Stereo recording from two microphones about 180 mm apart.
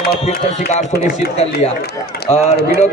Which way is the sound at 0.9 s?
60° left (ahead or behind).